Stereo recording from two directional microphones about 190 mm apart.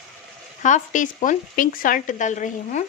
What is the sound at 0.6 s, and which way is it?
Speech, 40° left (ahead or behind).